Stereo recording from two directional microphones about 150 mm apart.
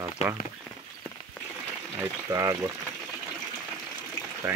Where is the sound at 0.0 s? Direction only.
15° right (ahead or behind).